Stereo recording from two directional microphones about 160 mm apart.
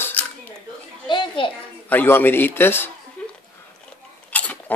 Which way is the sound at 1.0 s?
30° left (ahead or behind).